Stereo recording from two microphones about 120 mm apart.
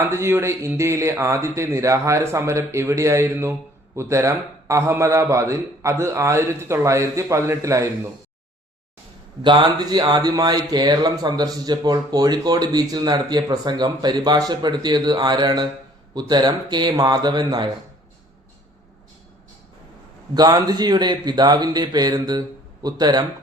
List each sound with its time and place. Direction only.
0.0 s a man's voice: 20° right (ahead or behind)
9.4 s a man's voice: 45° right (ahead or behind)
20.3 s speech: 35° right (ahead or behind)